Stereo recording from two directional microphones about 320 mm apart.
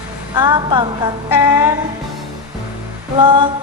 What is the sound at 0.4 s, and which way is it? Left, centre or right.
Speech, centre.